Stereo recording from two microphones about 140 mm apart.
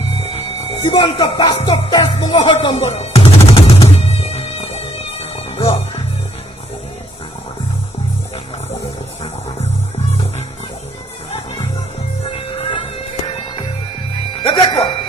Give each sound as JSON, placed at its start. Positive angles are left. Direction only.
{"t": 0.2, "sound": "music", "side_deg": 40}
{"t": 0.8, "sound": "speech", "side_deg": 30}
{"t": 1.6, "sound": "music", "side_deg": 30}
{"t": 2.9, "sound": "music", "side_deg": 45}
{"t": 12.2, "sound": "music", "side_deg": 40}